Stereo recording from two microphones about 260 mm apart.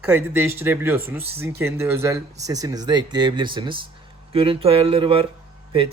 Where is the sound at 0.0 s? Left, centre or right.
Centre.